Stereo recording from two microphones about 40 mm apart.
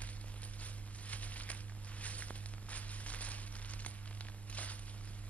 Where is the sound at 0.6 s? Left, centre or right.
Left.